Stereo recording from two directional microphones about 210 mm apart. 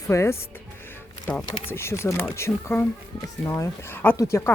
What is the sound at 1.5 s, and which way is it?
Speech, 10° left (ahead or behind).